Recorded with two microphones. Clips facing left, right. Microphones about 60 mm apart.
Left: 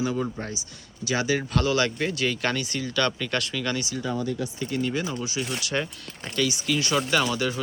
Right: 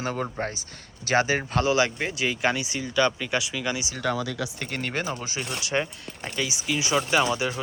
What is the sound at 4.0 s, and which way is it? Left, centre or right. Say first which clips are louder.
Speech: right 1 dB; right.